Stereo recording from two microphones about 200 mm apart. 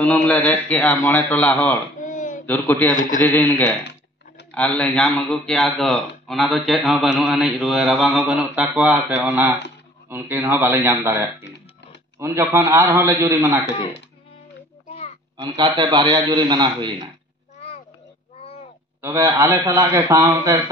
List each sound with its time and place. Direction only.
0.0 s a man's voice: 5° left (ahead or behind)
2.0 s a sound: 40° left (ahead or behind)
2.4 s a man's voice: 10° left (ahead or behind); by 13.6 s 15° right (ahead or behind)
15.3 s a man's voice: 20° right (ahead or behind)
17.6 s a sound: 30° left (ahead or behind)
18.9 s a man's voice: 10° right (ahead or behind)